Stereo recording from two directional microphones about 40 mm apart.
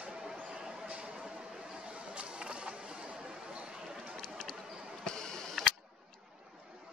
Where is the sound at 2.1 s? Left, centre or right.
Right.